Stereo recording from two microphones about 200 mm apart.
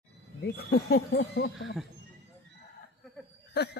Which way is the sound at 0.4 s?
50° left (ahead or behind).